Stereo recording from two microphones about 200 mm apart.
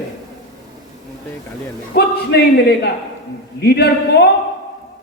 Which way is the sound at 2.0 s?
55° left (ahead or behind).